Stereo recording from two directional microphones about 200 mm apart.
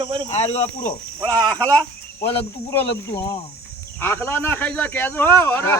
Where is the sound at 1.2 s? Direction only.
20° right (ahead or behind).